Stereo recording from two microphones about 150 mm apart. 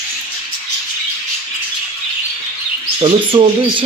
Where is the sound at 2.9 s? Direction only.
35° right (ahead or behind).